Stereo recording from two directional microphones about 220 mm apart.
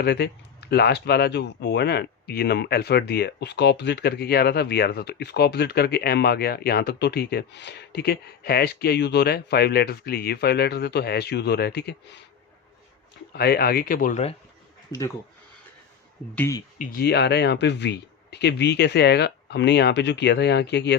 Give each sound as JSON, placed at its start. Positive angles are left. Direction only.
{"t": 0.0, "sound": "speech", "side_deg": 50}
{"t": 13.3, "sound": "speech", "side_deg": 45}
{"t": 14.9, "sound": "speech", "side_deg": 20}
{"t": 16.3, "sound": "speech", "side_deg": 10}
{"t": 16.7, "sound": "speech", "side_deg": 40}